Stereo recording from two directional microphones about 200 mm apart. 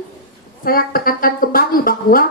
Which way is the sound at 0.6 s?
45° left (ahead or behind).